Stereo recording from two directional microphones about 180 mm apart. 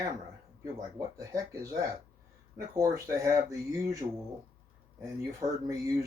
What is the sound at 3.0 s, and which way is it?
Speech, 15° right (ahead or behind).